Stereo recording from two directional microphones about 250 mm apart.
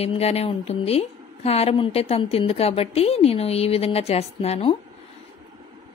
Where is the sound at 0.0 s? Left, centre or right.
Left.